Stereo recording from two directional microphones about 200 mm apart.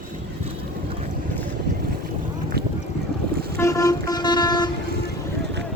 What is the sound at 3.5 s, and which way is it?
Vehicle, 15° left (ahead or behind).